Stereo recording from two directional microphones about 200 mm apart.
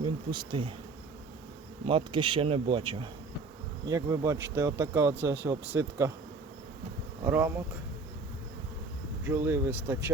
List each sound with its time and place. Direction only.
0.0 s speech: 25° right (ahead or behind)
1.9 s speech: 25° right (ahead or behind)
7.3 s speech: 10° right (ahead or behind)
9.2 s speech: 15° right (ahead or behind)